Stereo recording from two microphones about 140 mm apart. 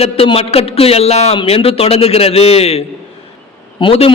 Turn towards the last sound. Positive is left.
turn(degrees=40)  # may be behind; listen again after turning